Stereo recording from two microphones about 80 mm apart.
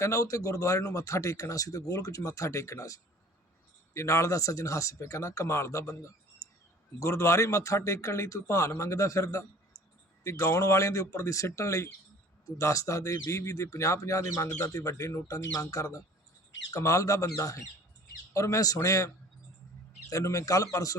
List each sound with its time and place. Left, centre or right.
0.0 s a man's voice: left
6.4 s a sound: left
7.0 s a man's voice: left